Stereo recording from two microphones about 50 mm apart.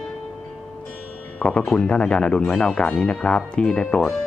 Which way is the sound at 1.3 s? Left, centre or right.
Centre.